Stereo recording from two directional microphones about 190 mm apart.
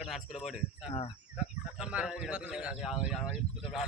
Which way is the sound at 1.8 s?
5° right (ahead or behind).